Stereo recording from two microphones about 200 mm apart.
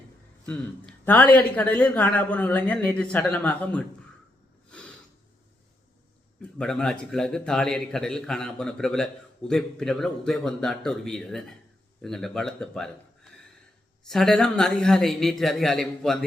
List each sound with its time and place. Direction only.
0.4 s speech: 5° left (ahead or behind)
6.4 s a man's voice: 5° left (ahead or behind)
14.0 s a man's voice: centre (ahead or behind)